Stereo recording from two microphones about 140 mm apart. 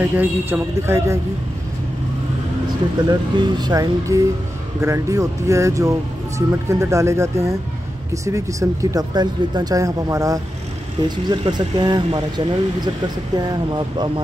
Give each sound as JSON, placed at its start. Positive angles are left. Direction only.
{"t": 0.0, "sound": "speech", "side_deg": -15}
{"t": 3.1, "sound": "speech", "side_deg": -30}